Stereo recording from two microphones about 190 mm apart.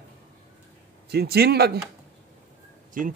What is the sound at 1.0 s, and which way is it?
Speech, 55° right (ahead or behind).